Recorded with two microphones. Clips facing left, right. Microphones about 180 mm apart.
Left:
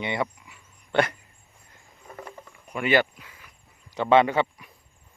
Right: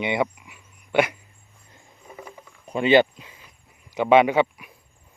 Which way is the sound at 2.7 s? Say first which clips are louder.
Right 6 dB; 25° right (ahead or behind).